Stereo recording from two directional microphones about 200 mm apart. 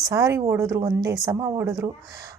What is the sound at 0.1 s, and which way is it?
A woman's voice, 15° right (ahead or behind).